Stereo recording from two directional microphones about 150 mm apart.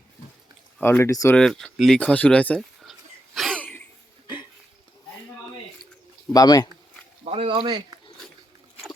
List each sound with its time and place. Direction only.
0.8 s speech: 15° left (ahead or behind)
1.4 s speech: 5° left (ahead or behind)
3.3 s cough: centre (ahead or behind)
6.3 s speech: 25° left (ahead or behind)
7.3 s speech: 35° right (ahead or behind)